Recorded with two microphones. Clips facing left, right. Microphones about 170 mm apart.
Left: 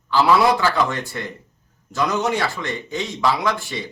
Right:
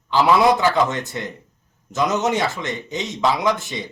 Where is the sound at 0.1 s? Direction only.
20° right (ahead or behind).